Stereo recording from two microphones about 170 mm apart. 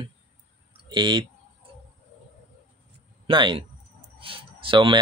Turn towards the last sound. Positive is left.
turn(degrees=-30)  # may be behind; listen again after turning